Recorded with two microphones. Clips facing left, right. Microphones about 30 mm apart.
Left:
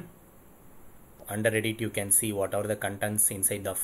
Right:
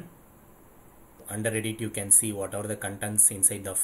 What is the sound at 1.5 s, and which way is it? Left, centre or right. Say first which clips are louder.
Speech: left 2 dB; centre.